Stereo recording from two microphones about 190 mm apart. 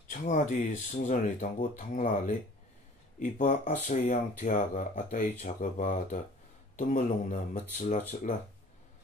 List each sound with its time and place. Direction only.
0.1 s speech: 40° left (ahead or behind)